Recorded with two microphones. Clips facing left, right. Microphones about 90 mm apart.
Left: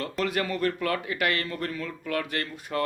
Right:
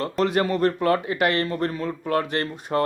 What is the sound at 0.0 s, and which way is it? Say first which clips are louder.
Speech: right 6 dB; 30° right (ahead or behind).